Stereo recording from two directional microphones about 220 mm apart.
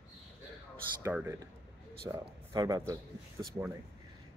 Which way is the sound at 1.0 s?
10° right (ahead or behind).